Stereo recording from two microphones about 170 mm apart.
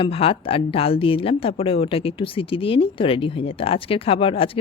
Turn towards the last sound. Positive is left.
turn(degrees=35)  # may be behind; listen again after turning